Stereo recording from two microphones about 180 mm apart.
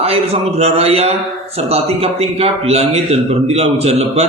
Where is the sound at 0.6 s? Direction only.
35° right (ahead or behind).